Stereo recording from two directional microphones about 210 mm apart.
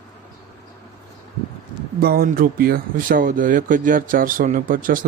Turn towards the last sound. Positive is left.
turn(degrees=-40)  # may be behind; listen again after turning